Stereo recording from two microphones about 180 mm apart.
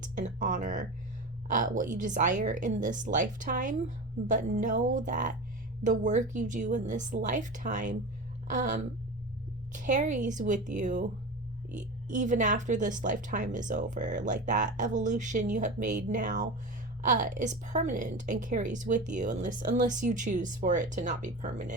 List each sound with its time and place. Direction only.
0.0 s a woman's voice: 45° right (ahead or behind)